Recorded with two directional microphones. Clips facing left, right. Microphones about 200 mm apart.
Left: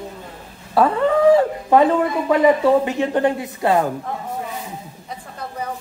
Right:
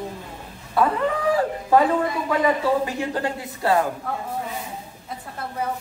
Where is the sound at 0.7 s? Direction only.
30° left (ahead or behind).